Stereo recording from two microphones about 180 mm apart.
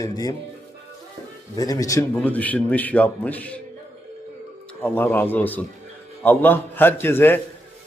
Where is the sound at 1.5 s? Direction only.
20° left (ahead or behind).